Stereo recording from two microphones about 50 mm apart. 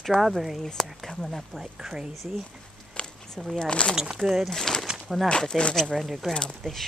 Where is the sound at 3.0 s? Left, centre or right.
Left.